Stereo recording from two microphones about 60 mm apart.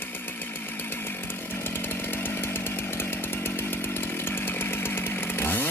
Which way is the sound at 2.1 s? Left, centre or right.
Left.